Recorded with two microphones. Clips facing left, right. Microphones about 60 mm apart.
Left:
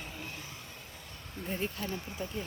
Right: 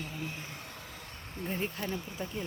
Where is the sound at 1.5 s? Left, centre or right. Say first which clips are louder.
Right 1 dB; centre.